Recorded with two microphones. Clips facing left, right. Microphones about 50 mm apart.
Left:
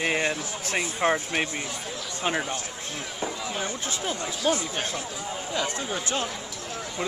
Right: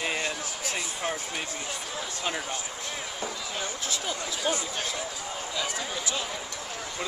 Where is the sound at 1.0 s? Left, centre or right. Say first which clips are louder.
Left 9 dB; left.